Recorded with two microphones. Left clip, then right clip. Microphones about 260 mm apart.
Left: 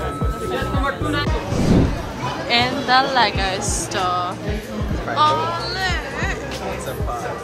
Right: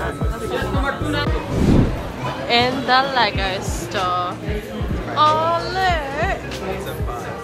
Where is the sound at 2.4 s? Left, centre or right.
Centre.